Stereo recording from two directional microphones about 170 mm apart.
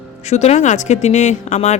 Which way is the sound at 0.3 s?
40° left (ahead or behind).